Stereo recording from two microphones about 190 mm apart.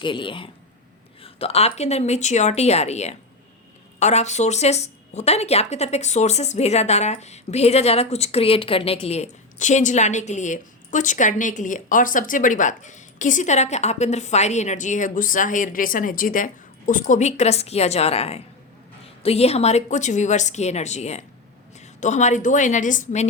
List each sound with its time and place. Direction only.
0.0 s speech: 25° left (ahead or behind); by 23.2 s 40° left (ahead or behind)